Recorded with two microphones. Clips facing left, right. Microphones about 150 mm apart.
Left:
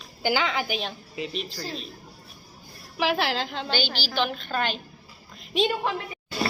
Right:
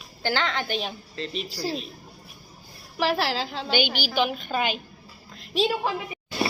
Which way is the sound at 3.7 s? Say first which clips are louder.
Right 4 dB; 15° right (ahead or behind).